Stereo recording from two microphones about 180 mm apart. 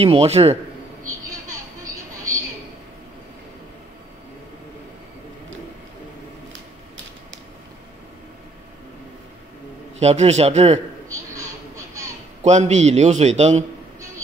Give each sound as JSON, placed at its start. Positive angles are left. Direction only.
{"t": 0.0, "sound": "a man's voice", "side_deg": -35}
{"t": 9.9, "sound": "a man's voice", "side_deg": -35}
{"t": 11.1, "sound": "a sound", "side_deg": -15}
{"t": 12.4, "sound": "a man's voice", "side_deg": -40}